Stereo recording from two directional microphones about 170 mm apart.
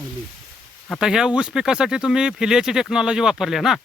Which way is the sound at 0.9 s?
5° right (ahead or behind).